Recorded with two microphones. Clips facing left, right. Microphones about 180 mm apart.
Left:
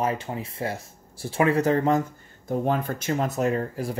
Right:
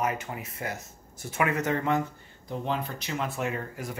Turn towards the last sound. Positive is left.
turn(degrees=35)  # may be behind; listen again after turning